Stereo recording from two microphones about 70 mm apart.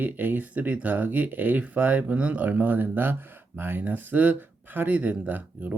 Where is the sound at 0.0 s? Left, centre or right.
Right.